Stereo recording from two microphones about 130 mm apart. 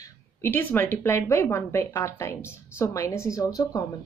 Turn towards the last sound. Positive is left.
turn(degrees=25)  # may be behind; listen again after turning